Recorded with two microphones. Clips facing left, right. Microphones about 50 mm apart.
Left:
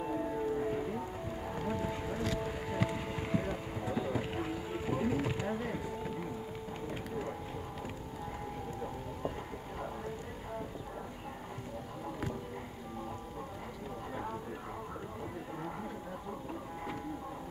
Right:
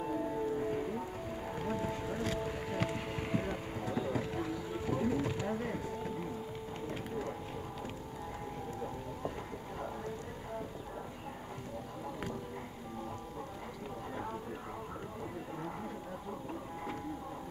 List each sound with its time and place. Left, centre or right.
0.0 s music: centre
3.9 s vehicle: centre
4.2 s a sound: left; by 7.3 s centre